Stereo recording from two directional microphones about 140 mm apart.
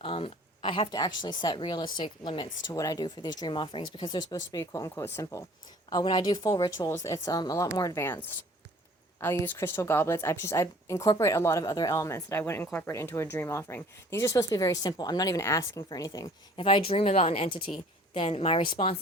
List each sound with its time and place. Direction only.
0.0 s a woman's voice: 40° left (ahead or behind); by 16.3 s 25° left (ahead or behind)
16.6 s speech: 40° left (ahead or behind)